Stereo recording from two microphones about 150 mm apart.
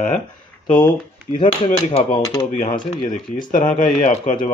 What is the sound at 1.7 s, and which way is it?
Speech, 50° left (ahead or behind).